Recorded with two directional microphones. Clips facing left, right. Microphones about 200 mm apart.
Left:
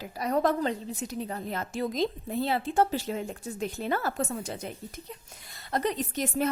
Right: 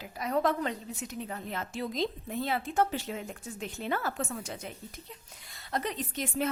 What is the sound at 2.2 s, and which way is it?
A woman's voice, 30° left (ahead or behind).